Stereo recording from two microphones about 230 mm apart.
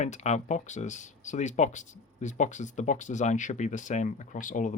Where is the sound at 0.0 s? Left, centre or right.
Left.